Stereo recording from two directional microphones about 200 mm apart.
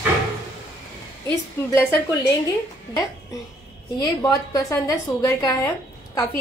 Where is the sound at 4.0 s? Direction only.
20° left (ahead or behind).